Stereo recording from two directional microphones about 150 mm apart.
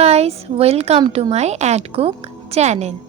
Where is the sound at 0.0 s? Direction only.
45° right (ahead or behind).